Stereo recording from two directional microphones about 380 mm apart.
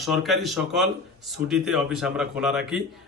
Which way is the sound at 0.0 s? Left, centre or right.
Centre.